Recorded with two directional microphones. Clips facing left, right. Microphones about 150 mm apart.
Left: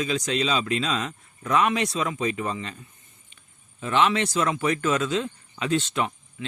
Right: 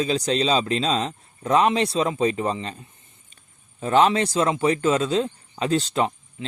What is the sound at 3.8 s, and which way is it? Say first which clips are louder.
A man's voice: right 4 dB; 35° right (ahead or behind).